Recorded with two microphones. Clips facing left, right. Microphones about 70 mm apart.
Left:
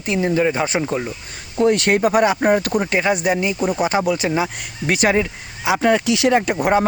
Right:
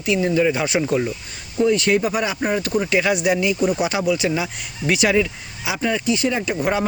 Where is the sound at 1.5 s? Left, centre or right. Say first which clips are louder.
Left 1 dB; left.